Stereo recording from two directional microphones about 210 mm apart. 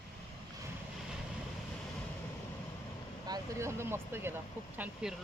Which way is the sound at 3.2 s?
15° right (ahead or behind).